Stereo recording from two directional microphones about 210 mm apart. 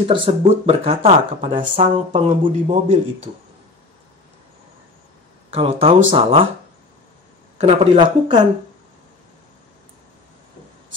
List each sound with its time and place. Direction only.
0.1 s speech: 25° right (ahead or behind)
5.5 s speech: 25° right (ahead or behind)
7.5 s speech: 30° right (ahead or behind)